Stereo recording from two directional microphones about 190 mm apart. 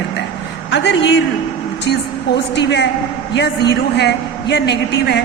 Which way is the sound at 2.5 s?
65° left (ahead or behind).